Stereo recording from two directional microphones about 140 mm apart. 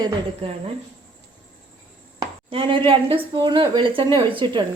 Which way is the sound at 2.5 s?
40° right (ahead or behind).